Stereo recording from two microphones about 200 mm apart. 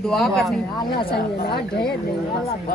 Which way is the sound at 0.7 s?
20° left (ahead or behind).